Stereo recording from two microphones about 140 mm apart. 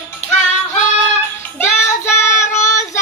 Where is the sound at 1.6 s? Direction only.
20° left (ahead or behind).